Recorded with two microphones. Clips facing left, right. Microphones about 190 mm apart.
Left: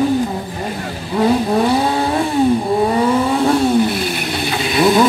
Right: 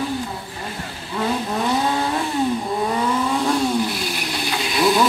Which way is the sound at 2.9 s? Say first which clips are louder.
Left 6 dB; 65° left (ahead or behind).